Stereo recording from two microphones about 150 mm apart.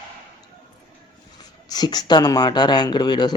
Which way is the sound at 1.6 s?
25° left (ahead or behind).